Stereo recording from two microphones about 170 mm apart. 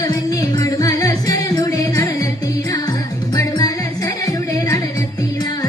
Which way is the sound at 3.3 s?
20° left (ahead or behind).